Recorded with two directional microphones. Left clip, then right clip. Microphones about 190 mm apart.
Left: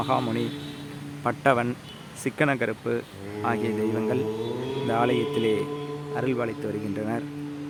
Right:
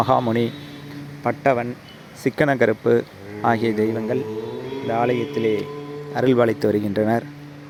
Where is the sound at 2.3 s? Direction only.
30° right (ahead or behind).